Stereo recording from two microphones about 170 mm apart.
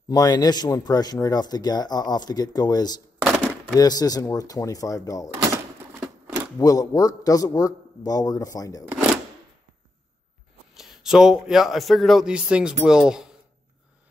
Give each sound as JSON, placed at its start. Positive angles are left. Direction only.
{"t": 0.1, "sound": "speech", "side_deg": 25}
{"t": 3.2, "sound": "a sound", "side_deg": -5}
{"t": 3.7, "sound": "speech", "side_deg": 20}
{"t": 5.3, "sound": "typewriter", "side_deg": -15}
{"t": 6.6, "sound": "speech", "side_deg": 20}
{"t": 8.8, "sound": "a sound", "side_deg": 0}
{"t": 10.7, "sound": "speech", "side_deg": 0}